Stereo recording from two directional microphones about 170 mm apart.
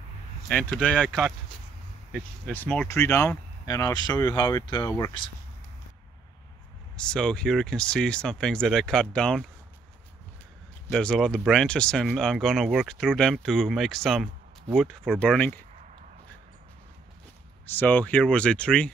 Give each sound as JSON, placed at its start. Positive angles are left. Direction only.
{"t": 0.5, "sound": "speech", "side_deg": 5}
{"t": 7.0, "sound": "speech", "side_deg": 5}
{"t": 10.9, "sound": "speech", "side_deg": 5}
{"t": 17.6, "sound": "speech", "side_deg": 10}